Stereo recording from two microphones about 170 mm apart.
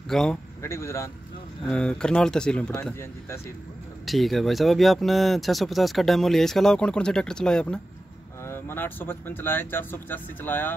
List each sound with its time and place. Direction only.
0.1 s speech: 5° left (ahead or behind)
0.6 s speech: 15° left (ahead or behind)
1.7 s speech: 5° left (ahead or behind)
2.7 s speech: 15° left (ahead or behind)
4.0 s speech: centre (ahead or behind)